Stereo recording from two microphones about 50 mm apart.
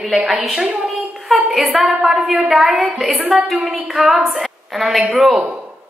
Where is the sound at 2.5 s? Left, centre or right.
Centre.